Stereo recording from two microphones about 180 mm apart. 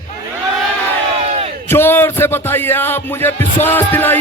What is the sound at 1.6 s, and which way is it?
Music, 10° left (ahead or behind).